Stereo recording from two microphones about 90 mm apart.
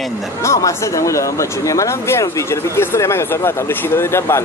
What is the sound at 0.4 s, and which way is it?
Speech, 35° left (ahead or behind).